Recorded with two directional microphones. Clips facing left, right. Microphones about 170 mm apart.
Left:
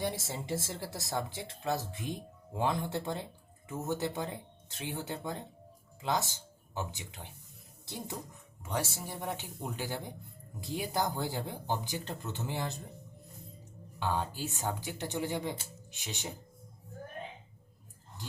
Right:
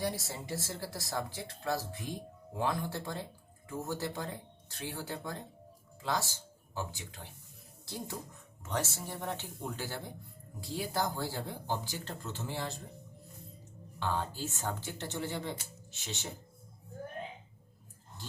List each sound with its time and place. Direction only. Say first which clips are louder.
0.0 s speech: left 1 dB; 20° left (ahead or behind)
14.0 s speech: left 1 dB; 15° left (ahead or behind)